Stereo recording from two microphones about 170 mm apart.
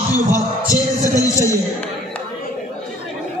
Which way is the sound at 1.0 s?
20° left (ahead or behind).